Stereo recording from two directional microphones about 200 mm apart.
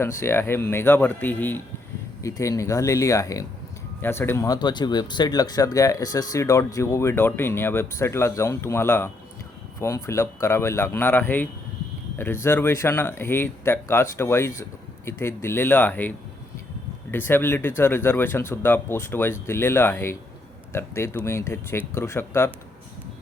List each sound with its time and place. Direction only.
0.0 s speech: 10° left (ahead or behind)